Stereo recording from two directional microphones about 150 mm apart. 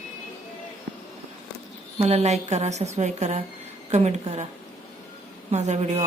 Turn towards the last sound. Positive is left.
turn(degrees=-50)  # may be behind; listen again after turning